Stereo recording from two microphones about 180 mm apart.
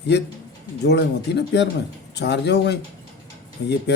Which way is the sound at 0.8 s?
65° left (ahead or behind).